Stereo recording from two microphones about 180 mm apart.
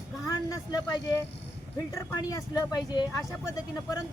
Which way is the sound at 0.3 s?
20° left (ahead or behind).